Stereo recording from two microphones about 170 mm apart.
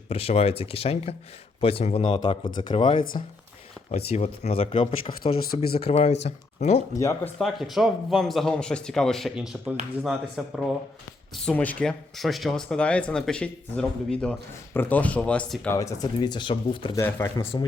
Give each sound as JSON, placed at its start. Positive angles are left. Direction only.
{"t": 0.1, "sound": "speech", "side_deg": 35}
{"t": 6.9, "sound": "speech", "side_deg": 15}
{"t": 7.3, "sound": "speech", "side_deg": 0}
{"t": 11.4, "sound": "speech", "side_deg": 10}
{"t": 15.7, "sound": "speech", "side_deg": 20}
{"t": 17.0, "sound": "speech", "side_deg": 15}
{"t": 17.4, "sound": "speech", "side_deg": 30}